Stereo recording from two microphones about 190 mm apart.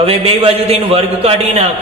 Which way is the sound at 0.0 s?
30° right (ahead or behind).